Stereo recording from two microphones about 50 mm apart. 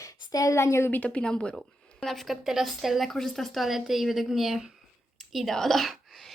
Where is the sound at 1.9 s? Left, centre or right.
Centre.